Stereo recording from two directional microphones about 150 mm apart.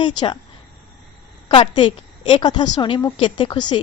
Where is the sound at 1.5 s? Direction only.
35° left (ahead or behind).